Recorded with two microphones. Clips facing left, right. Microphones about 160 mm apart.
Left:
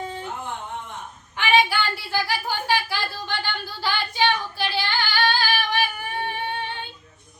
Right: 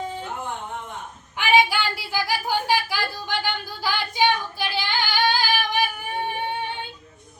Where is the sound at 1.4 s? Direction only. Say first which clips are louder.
Right 1 dB; 10° right (ahead or behind).